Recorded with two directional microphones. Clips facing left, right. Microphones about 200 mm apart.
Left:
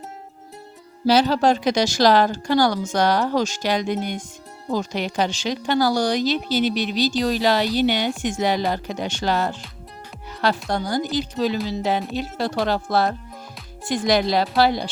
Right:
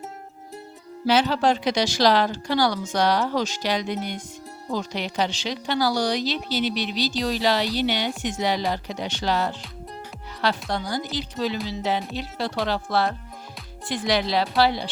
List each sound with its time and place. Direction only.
1.0 s a woman's voice: 40° left (ahead or behind)